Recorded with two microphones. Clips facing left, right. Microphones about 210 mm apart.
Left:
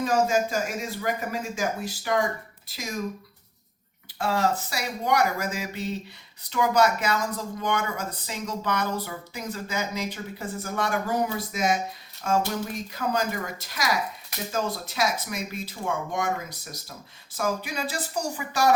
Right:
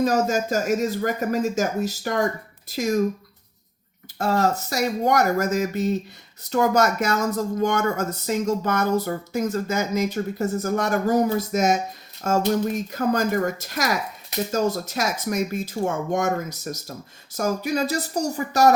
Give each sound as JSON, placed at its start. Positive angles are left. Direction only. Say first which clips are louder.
{"t": 0.0, "sound": "speech", "louder": "right 2 dB", "side_deg": -45}
{"t": 4.2, "sound": "speech", "louder": "right 3 dB", "side_deg": -45}